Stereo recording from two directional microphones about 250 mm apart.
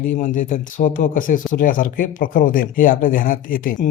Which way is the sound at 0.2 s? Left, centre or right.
Left.